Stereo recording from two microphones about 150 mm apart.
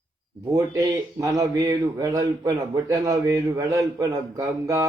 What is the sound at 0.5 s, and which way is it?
Speech, 25° right (ahead or behind).